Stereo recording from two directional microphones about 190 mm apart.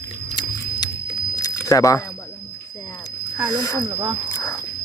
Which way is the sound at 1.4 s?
15° left (ahead or behind).